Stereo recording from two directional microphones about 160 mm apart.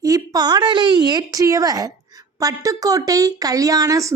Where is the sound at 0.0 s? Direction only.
20° right (ahead or behind).